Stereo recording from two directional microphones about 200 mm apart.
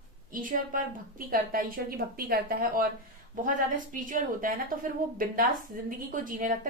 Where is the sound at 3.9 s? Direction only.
40° right (ahead or behind).